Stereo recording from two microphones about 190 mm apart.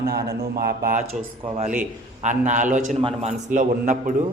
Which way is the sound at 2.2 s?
40° right (ahead or behind).